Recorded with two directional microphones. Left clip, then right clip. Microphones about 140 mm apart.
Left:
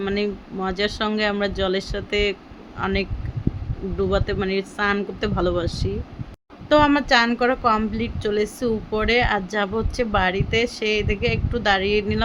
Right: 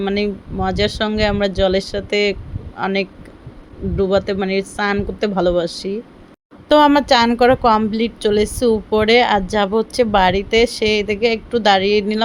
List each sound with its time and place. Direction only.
0.0 s speech: 30° right (ahead or behind)
6.7 s a woman's voice: 45° right (ahead or behind)